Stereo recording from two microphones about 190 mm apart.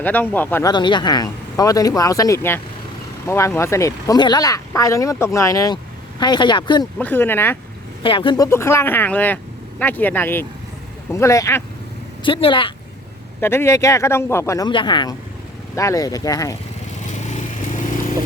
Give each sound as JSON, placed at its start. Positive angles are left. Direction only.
{"t": 0.0, "sound": "speech", "side_deg": 10}
{"t": 0.7, "sound": "speech", "side_deg": 25}
{"t": 7.0, "sound": "speech", "side_deg": 10}
{"t": 8.0, "sound": "speech", "side_deg": 25}
{"t": 12.2, "sound": "speech", "side_deg": 25}
{"t": 13.4, "sound": "speech", "side_deg": 15}
{"t": 17.2, "sound": "motorcycle", "side_deg": 40}